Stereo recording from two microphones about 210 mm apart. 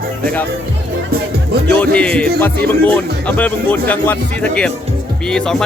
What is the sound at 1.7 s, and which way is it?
Speech, 5° left (ahead or behind).